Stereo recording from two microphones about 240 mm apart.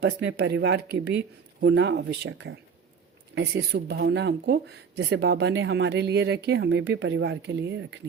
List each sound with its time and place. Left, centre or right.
0.0 s speech: right